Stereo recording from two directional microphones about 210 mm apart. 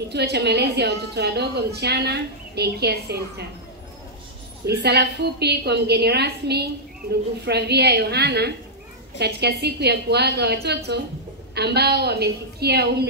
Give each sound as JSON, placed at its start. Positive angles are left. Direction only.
{"t": 0.1, "sound": "a woman's voice", "side_deg": -50}
{"t": 4.6, "sound": "a woman's voice", "side_deg": -50}